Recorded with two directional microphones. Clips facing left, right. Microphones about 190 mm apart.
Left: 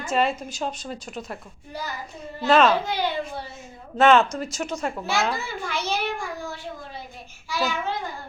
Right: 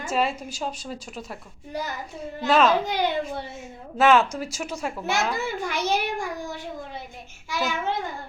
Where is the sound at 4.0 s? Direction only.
5° right (ahead or behind).